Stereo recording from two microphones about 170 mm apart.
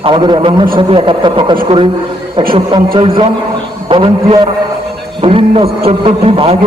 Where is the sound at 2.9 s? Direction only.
30° right (ahead or behind).